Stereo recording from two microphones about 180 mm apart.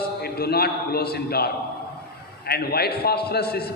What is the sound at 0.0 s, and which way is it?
A man's voice, 60° left (ahead or behind).